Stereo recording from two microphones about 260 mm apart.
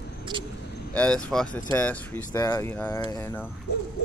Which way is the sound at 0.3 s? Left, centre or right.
Centre.